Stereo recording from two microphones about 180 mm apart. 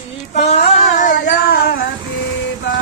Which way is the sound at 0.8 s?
45° left (ahead or behind).